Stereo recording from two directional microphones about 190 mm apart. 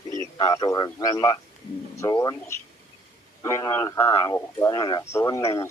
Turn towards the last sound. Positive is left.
turn(degrees=15)  # may be behind; listen again after turning